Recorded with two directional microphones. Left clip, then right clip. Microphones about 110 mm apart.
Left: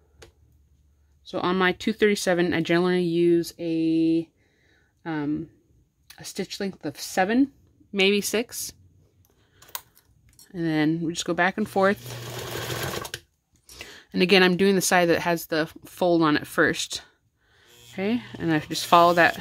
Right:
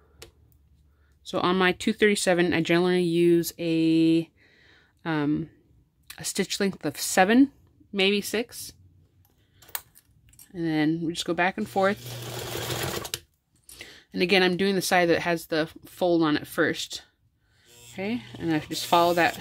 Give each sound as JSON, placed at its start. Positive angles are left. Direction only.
{"t": 1.4, "sound": "speech", "side_deg": 0}
{"t": 3.3, "sound": "speech", "side_deg": -15}
{"t": 7.9, "sound": "speech", "side_deg": 15}
{"t": 10.5, "sound": "speech", "side_deg": 25}
{"t": 13.7, "sound": "speech", "side_deg": 30}
{"t": 15.9, "sound": "speech", "side_deg": 30}